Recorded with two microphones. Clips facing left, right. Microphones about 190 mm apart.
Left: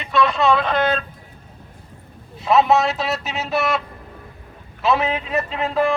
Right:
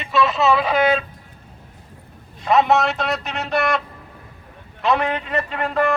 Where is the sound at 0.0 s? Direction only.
Centre (ahead or behind).